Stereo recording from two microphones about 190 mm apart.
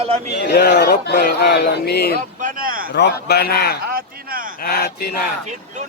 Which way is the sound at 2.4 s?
50° right (ahead or behind).